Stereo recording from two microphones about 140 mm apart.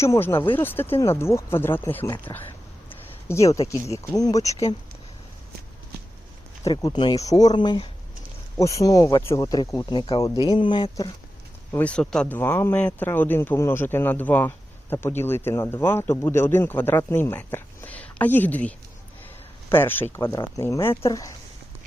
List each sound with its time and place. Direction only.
0.0 s speech: 20° left (ahead or behind)
2.0 s speech: 30° left (ahead or behind)
3.2 s speech: 20° left (ahead or behind)
6.7 s speech: 30° left (ahead or behind)
8.5 s speech: 20° left (ahead or behind)
11.7 s speech: 10° left (ahead or behind)
19.7 s speech: 15° left (ahead or behind)